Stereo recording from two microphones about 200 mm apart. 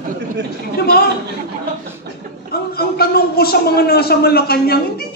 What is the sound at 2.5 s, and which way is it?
A man's voice, 50° left (ahead or behind).